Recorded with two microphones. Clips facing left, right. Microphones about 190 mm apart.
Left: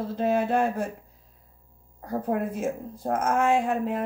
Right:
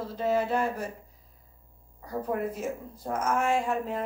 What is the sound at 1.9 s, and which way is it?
A woman's voice, 55° left (ahead or behind).